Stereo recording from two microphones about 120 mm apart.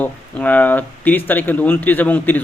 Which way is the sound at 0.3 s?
10° left (ahead or behind).